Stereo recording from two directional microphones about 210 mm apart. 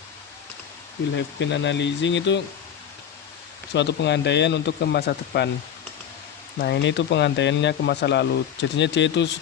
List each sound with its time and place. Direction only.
1.1 s speech: 60° left (ahead or behind)
3.8 s speech: 55° left (ahead or behind)
6.6 s speech: 55° left (ahead or behind)